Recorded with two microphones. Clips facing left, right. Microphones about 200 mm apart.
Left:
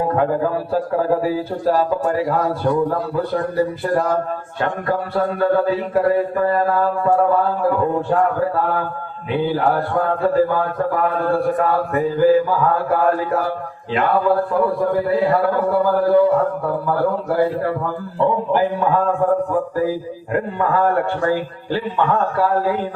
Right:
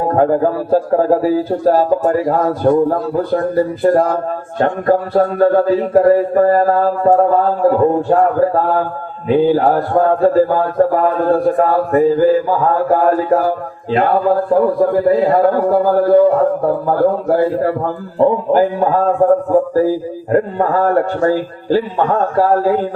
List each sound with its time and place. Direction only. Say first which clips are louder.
0.1 s a man's voice: right 5 dB; 40° right (ahead or behind)